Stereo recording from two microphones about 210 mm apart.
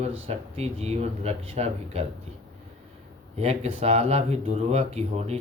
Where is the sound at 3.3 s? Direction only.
30° right (ahead or behind).